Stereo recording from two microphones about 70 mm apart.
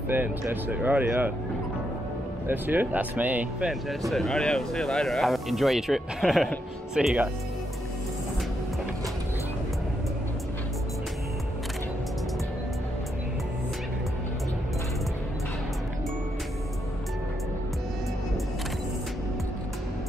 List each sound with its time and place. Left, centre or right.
0.1 s speech: right
2.4 s speech: right
4.1 s speech: centre
7.0 s speech: centre